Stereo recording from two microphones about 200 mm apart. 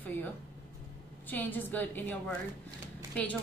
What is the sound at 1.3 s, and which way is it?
A woman's voice, 10° left (ahead or behind).